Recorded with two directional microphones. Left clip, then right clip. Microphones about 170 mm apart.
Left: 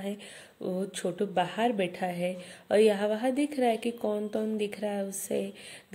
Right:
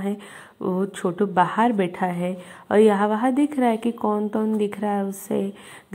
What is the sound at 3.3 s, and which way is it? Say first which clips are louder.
Speech: right 7 dB; 40° right (ahead or behind).